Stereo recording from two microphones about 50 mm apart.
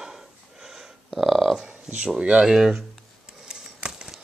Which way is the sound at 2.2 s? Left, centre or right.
Centre.